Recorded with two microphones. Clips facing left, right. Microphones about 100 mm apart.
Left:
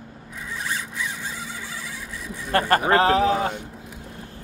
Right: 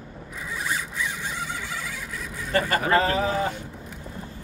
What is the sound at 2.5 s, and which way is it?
Speech, 65° left (ahead or behind).